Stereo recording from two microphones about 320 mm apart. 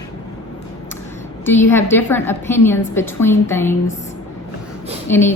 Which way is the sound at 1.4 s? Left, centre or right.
Centre.